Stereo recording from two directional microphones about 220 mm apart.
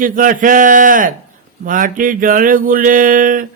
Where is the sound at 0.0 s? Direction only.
40° right (ahead or behind).